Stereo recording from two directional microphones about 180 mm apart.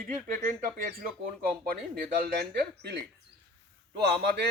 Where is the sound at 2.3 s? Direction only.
65° right (ahead or behind).